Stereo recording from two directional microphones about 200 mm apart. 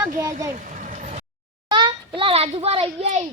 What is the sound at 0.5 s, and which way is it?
Vehicle, 40° right (ahead or behind).